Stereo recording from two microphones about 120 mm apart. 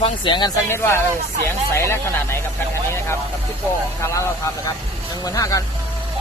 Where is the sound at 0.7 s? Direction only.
20° left (ahead or behind).